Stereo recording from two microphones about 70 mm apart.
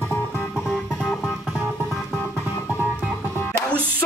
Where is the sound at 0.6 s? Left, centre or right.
Centre.